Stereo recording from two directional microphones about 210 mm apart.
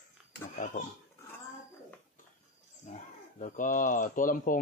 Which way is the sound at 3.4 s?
40° left (ahead or behind).